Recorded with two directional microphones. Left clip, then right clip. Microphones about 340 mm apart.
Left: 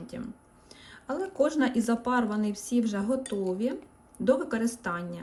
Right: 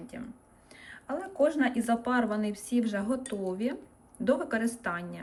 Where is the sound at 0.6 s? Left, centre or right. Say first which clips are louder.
Right 2 dB; centre.